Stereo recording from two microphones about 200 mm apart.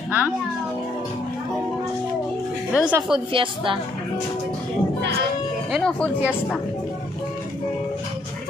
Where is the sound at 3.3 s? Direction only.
25° right (ahead or behind).